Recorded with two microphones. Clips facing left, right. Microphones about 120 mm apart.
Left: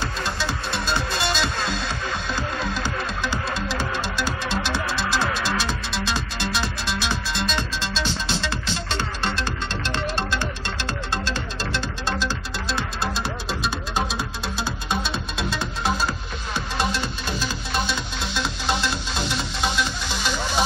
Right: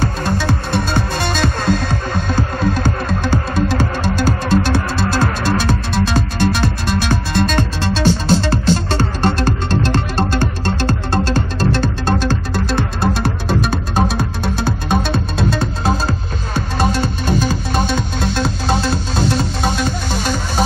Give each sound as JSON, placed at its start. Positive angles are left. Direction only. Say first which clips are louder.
{"t": 0.0, "sound": "music", "louder": "right 8 dB", "side_deg": -50}
{"t": 16.7, "sound": "music", "louder": "right 8 dB", "side_deg": -50}